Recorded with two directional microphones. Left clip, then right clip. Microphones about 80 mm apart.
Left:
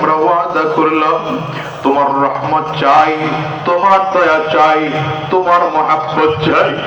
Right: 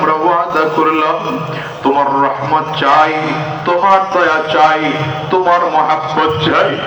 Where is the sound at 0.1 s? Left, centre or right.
Left.